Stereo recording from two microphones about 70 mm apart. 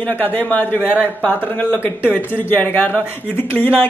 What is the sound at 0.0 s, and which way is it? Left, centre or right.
Speech, left.